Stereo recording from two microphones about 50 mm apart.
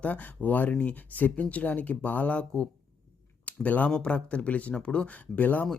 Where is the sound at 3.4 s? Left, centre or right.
Left.